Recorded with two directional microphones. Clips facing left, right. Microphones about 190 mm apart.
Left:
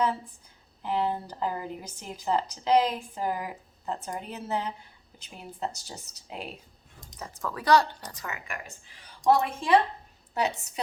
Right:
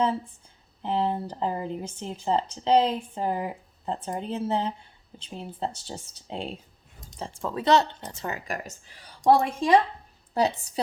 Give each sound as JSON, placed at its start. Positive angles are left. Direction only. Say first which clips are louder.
{"t": 0.8, "sound": "a woman's voice", "louder": "right 2 dB", "side_deg": -30}